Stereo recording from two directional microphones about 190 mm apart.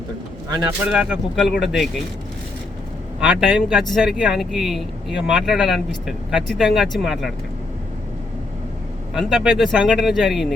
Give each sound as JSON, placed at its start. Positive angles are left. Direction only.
{"t": 0.9, "sound": "a man's voice", "side_deg": -5}
{"t": 3.2, "sound": "a man's voice", "side_deg": -5}
{"t": 9.1, "sound": "a man's voice", "side_deg": -5}